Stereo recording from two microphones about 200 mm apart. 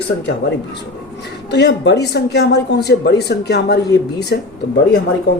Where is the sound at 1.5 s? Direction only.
60° left (ahead or behind).